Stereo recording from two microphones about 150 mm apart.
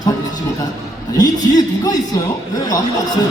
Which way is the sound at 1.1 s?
25° left (ahead or behind).